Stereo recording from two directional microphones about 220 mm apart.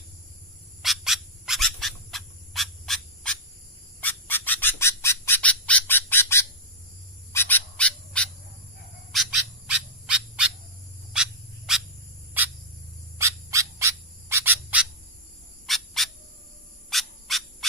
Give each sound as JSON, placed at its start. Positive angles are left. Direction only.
{"t": 0.8, "sound": "bird", "side_deg": 0}
{"t": 13.1, "sound": "bird", "side_deg": -15}